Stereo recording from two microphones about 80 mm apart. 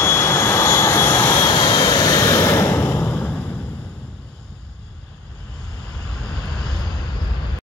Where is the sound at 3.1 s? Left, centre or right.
Centre.